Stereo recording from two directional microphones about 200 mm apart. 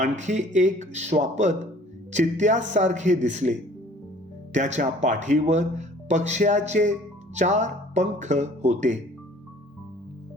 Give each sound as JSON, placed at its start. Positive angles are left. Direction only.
{"t": 0.0, "sound": "speech", "side_deg": -35}
{"t": 4.5, "sound": "speech", "side_deg": -35}